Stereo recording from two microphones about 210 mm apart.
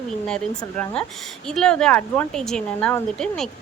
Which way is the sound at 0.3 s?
5° left (ahead or behind).